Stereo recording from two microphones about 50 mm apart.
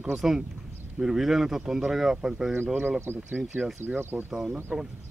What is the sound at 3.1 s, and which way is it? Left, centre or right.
Speech, right.